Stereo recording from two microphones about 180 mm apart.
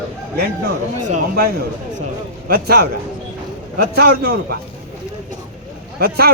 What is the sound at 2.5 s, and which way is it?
Speech, 55° right (ahead or behind).